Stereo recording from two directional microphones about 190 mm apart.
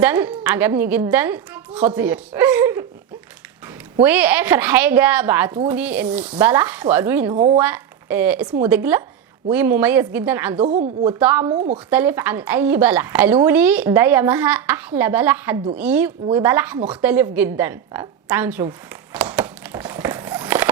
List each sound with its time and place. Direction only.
0.0 s a woman's voice: 10° right (ahead or behind)
4.0 s a woman's voice: 10° right (ahead or behind)
7.3 s speech: 30° right (ahead or behind)
7.6 s a woman's voice: 10° right (ahead or behind)
10.6 s speech: 35° right (ahead or behind)
11.2 s a woman's voice: 10° right (ahead or behind)
11.4 s speech: 35° right (ahead or behind)
11.9 s a woman's voice: 10° right (ahead or behind)
19.1 s a sound: 10° right (ahead or behind)